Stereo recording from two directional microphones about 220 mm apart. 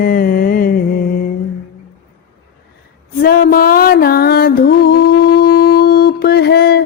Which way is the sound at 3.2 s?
40° left (ahead or behind).